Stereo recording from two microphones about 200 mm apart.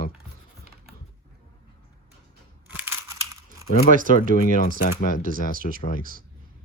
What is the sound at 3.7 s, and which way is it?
Speech, 40° left (ahead or behind).